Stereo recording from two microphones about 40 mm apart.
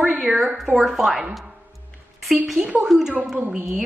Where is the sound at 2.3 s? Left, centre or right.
Centre.